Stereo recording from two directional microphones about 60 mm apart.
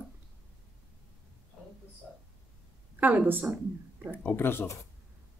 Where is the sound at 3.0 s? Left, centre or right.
Right.